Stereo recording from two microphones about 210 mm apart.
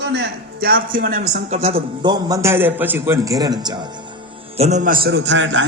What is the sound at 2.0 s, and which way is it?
A man's voice, 20° right (ahead or behind).